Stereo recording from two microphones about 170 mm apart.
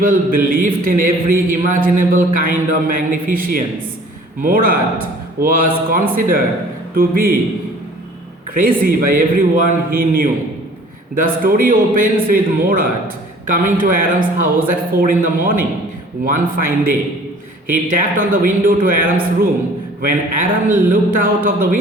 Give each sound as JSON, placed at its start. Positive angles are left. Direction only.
{"t": 0.0, "sound": "a man's voice", "side_deg": -55}
{"t": 8.5, "sound": "a man's voice", "side_deg": -55}
{"t": 17.7, "sound": "a man's voice", "side_deg": -55}